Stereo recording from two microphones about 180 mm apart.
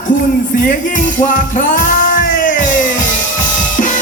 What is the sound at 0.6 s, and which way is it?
Music, 45° left (ahead or behind).